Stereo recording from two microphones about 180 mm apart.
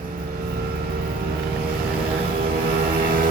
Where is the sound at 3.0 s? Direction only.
55° right (ahead or behind).